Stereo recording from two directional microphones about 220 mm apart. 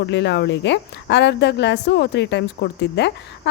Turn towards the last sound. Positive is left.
turn(degrees=50)  # may be behind; listen again after turning